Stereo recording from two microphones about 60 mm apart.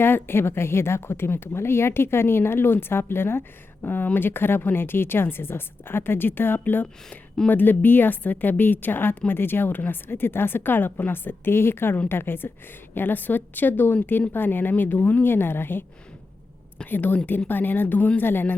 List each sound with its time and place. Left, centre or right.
0.0 s a woman's voice: left
16.8 s a woman's voice: left